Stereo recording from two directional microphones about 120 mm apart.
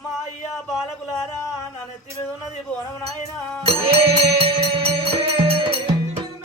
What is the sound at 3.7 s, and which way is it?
Music, 50° right (ahead or behind).